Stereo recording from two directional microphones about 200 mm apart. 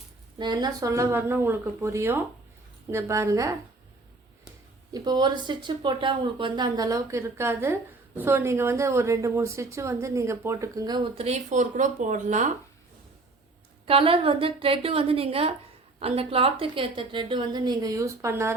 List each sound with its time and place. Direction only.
0.3 s speech: 20° right (ahead or behind)
4.9 s speech: 20° right (ahead or behind); by 12.5 s 40° right (ahead or behind)
13.8 s a woman's voice: 30° right (ahead or behind); by 18.5 s 15° right (ahead or behind)